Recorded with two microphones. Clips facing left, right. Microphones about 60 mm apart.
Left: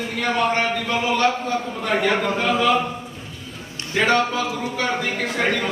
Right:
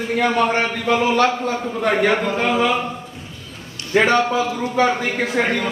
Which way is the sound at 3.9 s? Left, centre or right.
Right.